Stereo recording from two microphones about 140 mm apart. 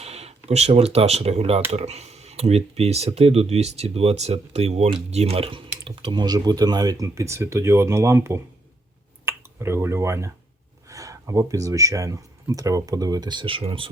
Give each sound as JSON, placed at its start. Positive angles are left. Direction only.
{"t": 0.0, "sound": "speech", "side_deg": -45}